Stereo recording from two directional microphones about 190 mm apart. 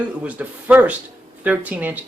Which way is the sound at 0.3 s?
5° right (ahead or behind).